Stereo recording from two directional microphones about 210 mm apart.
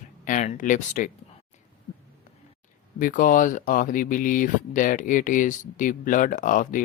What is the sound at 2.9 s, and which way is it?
Speech, 40° left (ahead or behind).